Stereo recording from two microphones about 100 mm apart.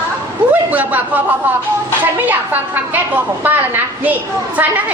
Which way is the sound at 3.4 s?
20° right (ahead or behind).